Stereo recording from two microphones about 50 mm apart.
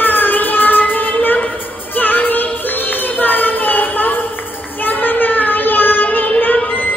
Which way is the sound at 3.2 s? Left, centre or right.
Left.